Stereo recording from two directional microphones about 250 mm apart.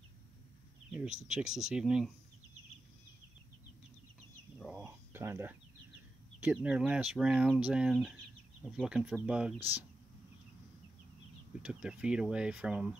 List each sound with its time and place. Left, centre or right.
0.9 s speech: centre
4.6 s a sound: centre
6.4 s speech: centre
11.6 s speech: centre